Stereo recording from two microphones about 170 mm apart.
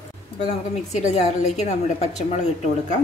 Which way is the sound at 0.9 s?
40° left (ahead or behind).